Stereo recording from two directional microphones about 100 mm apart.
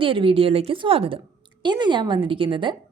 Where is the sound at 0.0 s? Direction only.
60° right (ahead or behind).